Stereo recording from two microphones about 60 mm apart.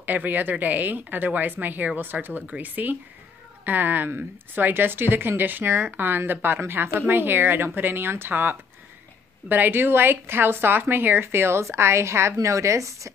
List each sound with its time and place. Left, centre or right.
0.0 s a woman's voice: right
12.4 s a woman's voice: right